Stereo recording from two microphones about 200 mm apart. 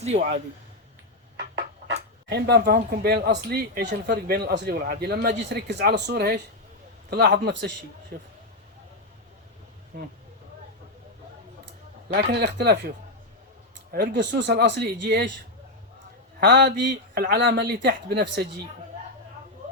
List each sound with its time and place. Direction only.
0.0 s speech: 35° right (ahead or behind)
2.3 s a man's voice: 55° right (ahead or behind)
11.6 s a sound: 55° right (ahead or behind)
13.9 s a man's voice: 55° right (ahead or behind)
16.4 s a man's voice: 55° right (ahead or behind)